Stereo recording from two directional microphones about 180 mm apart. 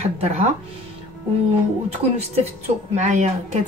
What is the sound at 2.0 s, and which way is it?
Speech, 35° right (ahead or behind).